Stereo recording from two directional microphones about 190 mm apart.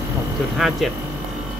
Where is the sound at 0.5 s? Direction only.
Centre (ahead or behind).